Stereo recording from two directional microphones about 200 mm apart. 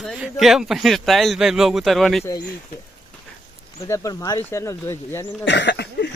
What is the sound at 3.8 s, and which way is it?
Speech, 15° left (ahead or behind).